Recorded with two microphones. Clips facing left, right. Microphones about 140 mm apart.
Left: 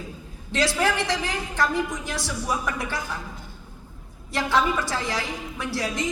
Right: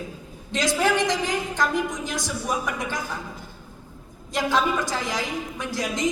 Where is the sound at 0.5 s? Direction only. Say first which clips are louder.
Right 1 dB; 15° right (ahead or behind).